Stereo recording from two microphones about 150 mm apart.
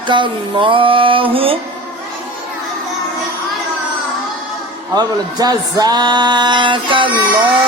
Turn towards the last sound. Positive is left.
turn(degrees=-35)  # may be behind; listen again after turning